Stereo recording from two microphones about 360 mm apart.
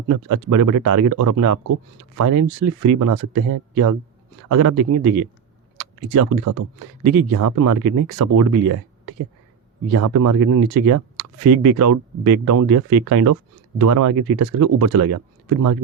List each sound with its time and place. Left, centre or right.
0.1 s speech: right
6.1 s speech: right